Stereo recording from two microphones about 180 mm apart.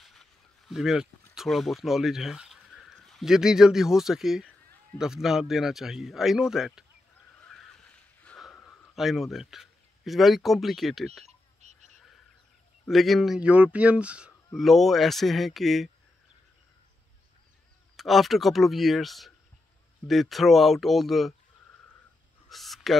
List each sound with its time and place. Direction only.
0.0 s speech: centre (ahead or behind)
8.2 s snort: 5° left (ahead or behind)
8.9 s speech: centre (ahead or behind)
11.2 s frog: 40° right (ahead or behind)
12.8 s speech: centre (ahead or behind)
17.9 s speech: centre (ahead or behind)
22.5 s a sound: centre (ahead or behind)